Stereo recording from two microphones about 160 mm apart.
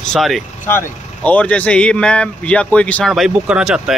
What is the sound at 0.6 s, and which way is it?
Speech, 10° left (ahead or behind).